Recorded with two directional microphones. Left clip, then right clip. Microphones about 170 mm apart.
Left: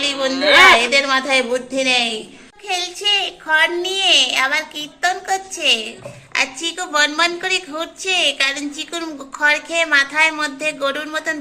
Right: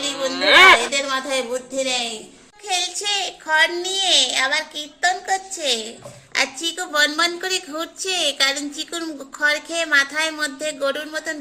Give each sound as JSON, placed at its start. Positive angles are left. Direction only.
{"t": 0.0, "sound": "a woman's voice", "side_deg": 0}
{"t": 2.6, "sound": "a child's voice", "side_deg": -30}